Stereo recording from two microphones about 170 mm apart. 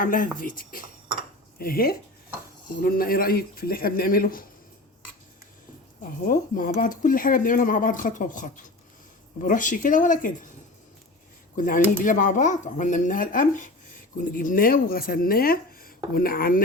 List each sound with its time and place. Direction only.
0.0 s speech: 55° left (ahead or behind)
6.0 s speech: 55° left (ahead or behind)
11.5 s speech: 50° left (ahead or behind)